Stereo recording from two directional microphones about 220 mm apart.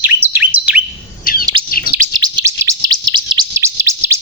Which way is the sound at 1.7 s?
40° left (ahead or behind).